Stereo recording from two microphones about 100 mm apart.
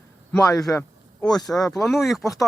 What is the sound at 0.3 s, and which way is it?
Speech, 30° left (ahead or behind).